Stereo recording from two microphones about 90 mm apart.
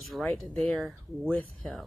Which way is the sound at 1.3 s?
15° left (ahead or behind).